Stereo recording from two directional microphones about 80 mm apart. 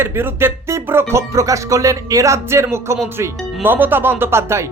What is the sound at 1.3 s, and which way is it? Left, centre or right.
A man's voice, right.